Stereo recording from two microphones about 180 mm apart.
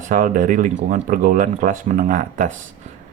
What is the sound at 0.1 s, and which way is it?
Speech, 50° right (ahead or behind).